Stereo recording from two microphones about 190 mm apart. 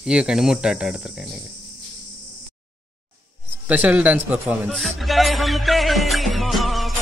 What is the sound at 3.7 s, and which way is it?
A man's voice, 5° right (ahead or behind).